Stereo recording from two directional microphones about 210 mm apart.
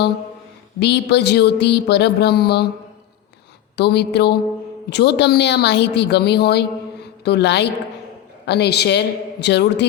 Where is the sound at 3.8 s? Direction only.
50° left (ahead or behind).